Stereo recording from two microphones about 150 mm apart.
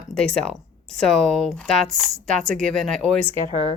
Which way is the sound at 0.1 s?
5° left (ahead or behind).